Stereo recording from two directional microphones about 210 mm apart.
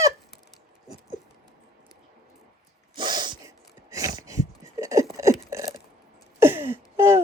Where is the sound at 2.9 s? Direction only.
20° right (ahead or behind).